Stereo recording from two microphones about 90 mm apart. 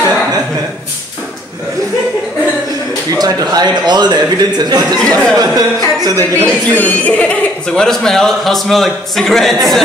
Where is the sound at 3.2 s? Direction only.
50° right (ahead or behind).